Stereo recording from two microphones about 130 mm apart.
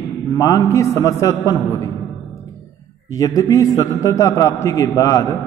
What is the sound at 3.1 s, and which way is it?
A man's voice, 25° left (ahead or behind).